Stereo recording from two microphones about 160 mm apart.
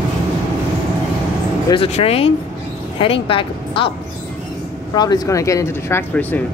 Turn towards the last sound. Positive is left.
turn(degrees=15)  # may be behind; listen again after turning